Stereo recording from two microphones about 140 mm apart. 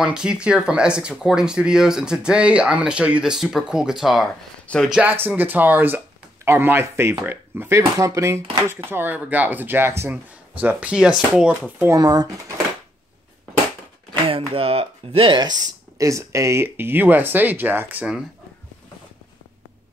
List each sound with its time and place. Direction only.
0.0 s speech: 5° right (ahead or behind)
11.9 s speech: 30° right (ahead or behind)
14.2 s speech: 40° right (ahead or behind); by 18.2 s 10° right (ahead or behind)